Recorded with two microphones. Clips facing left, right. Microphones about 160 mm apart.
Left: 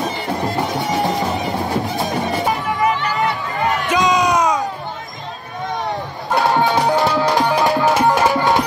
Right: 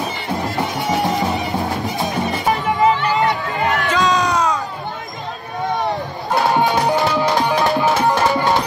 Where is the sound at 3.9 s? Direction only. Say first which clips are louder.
Left 3 dB; 15° left (ahead or behind).